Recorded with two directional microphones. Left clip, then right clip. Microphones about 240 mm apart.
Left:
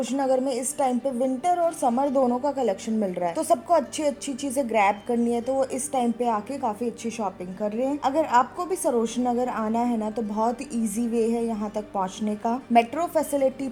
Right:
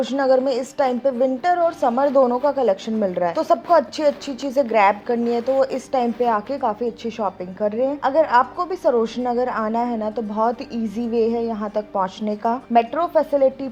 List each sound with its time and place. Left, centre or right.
0.0 s a woman's voice: centre